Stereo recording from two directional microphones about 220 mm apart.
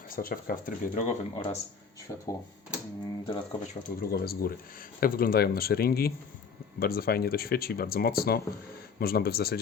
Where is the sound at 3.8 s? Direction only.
45° left (ahead or behind).